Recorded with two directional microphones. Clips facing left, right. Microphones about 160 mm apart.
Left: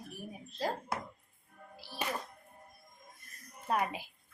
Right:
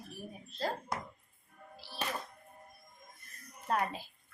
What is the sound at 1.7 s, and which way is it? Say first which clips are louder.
Music: left 1 dB; 15° left (ahead or behind).